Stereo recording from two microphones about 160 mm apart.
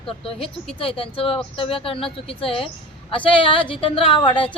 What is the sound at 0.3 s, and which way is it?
A woman's voice, 35° left (ahead or behind).